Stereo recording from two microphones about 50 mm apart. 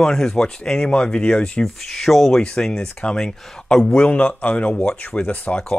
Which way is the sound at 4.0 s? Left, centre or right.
Left.